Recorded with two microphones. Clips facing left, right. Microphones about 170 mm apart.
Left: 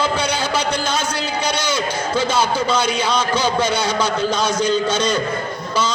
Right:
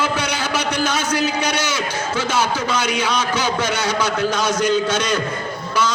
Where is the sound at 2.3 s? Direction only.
10° right (ahead or behind).